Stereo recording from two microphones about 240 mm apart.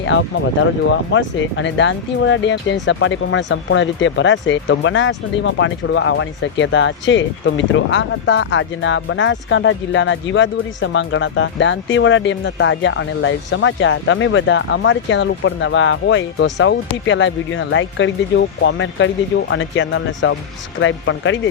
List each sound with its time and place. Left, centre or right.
0.0 s speech: left